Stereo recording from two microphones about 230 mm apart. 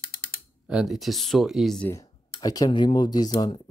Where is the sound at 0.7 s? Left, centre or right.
Centre.